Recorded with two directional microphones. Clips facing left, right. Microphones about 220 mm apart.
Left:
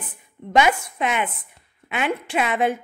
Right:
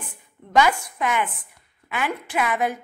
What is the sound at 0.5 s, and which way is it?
A woman's voice, 20° left (ahead or behind).